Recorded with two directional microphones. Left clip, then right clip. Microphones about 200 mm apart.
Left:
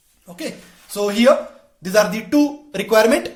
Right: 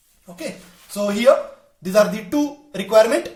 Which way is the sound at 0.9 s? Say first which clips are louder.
Left 1 dB; 35° left (ahead or behind).